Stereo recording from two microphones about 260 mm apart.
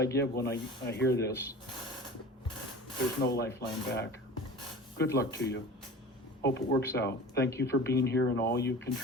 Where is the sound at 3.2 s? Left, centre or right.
Left.